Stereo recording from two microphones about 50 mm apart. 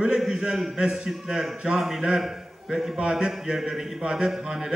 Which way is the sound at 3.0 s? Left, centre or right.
Centre.